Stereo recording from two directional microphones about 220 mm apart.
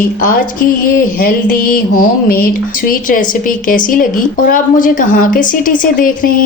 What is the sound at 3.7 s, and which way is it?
A woman's voice, 40° left (ahead or behind).